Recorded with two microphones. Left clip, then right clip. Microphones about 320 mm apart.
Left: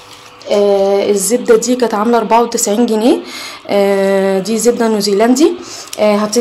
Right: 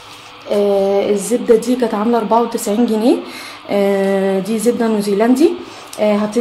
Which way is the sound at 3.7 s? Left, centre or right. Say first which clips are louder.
Left 4 dB; left.